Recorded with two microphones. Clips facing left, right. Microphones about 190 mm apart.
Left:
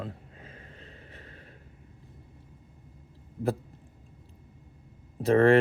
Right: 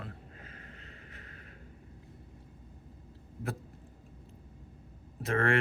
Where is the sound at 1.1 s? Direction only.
30° left (ahead or behind).